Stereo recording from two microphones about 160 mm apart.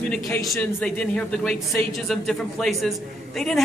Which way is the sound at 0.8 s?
5° left (ahead or behind).